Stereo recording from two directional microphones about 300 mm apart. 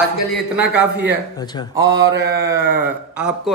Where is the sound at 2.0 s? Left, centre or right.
Right.